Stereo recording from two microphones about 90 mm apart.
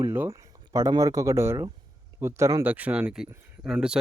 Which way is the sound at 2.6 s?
15° right (ahead or behind).